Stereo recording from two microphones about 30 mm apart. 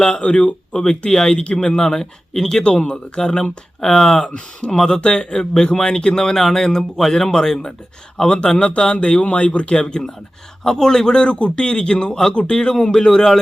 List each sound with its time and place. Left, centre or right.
0.1 s speech: left
0.7 s speech: left
4.6 s speech: left
6.3 s speech: centre
8.4 s speech: left
9.2 s speech: left
9.7 s speech: left